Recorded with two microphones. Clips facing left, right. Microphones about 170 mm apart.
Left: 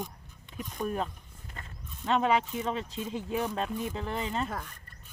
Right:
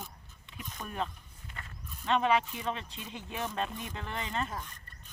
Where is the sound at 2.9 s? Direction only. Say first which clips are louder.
Left 9 dB; 40° left (ahead or behind).